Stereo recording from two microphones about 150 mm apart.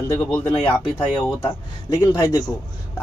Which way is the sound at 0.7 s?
30° left (ahead or behind).